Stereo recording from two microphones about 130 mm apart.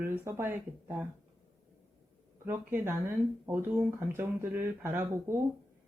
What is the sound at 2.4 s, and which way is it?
Speech, 15° right (ahead or behind).